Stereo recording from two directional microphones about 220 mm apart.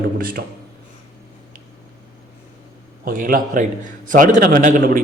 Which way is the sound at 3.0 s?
40° right (ahead or behind).